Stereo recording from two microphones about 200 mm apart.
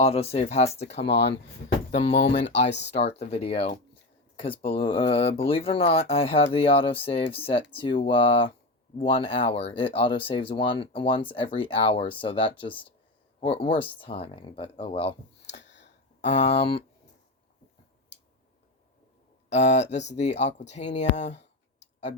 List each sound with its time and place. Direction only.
0.0 s speech: 30° left (ahead or behind)
1.0 s speech: 60° left (ahead or behind)
1.9 s speech: 35° left (ahead or behind)
2.6 s speech: 60° left (ahead or behind)
3.2 s speech: 30° left (ahead or behind)
15.5 s a sound: 60° left (ahead or behind)
16.6 s speech: 25° left (ahead or behind)
19.5 s speech: 35° left (ahead or behind)